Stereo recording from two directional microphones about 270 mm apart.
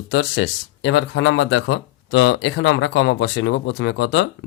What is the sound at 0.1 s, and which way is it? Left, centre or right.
Speech, left.